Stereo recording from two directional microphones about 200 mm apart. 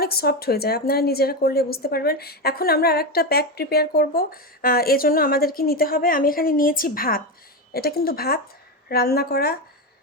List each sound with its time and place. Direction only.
0.0 s speech: 50° left (ahead or behind)